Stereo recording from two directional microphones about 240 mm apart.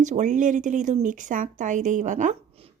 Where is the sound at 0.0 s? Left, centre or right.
Right.